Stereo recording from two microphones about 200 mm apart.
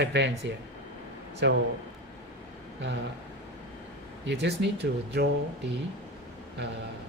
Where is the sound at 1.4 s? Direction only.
60° right (ahead or behind).